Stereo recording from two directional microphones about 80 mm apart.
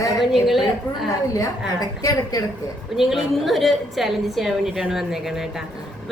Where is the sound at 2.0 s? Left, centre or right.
Left.